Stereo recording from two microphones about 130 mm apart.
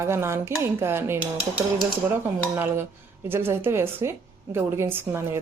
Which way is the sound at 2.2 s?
15° right (ahead or behind).